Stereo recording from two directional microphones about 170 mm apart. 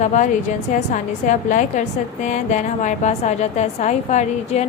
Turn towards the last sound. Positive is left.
turn(degrees=45)  # may be behind; listen again after turning